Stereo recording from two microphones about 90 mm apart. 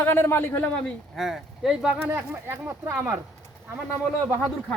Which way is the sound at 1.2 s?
Centre (ahead or behind).